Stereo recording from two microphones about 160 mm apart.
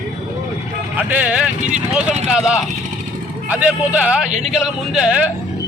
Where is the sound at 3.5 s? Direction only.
10° right (ahead or behind).